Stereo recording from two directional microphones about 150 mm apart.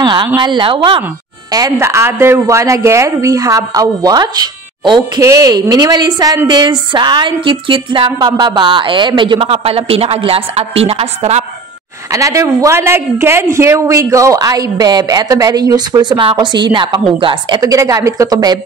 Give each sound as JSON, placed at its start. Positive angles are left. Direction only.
{"t": 0.0, "sound": "speech", "side_deg": -30}
{"t": 1.5, "sound": "speech", "side_deg": -20}
{"t": 12.1, "sound": "speech", "side_deg": -20}